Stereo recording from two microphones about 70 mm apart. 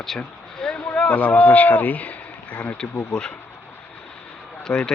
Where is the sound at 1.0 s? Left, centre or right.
Left.